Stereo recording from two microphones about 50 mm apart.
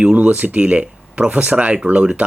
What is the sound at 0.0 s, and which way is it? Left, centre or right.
Speech, right.